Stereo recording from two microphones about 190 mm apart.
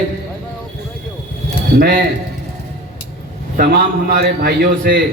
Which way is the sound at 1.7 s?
50° right (ahead or behind).